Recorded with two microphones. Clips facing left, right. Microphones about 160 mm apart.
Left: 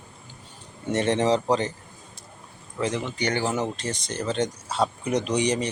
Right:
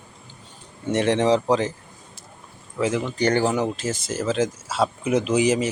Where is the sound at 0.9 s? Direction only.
Centre (ahead or behind).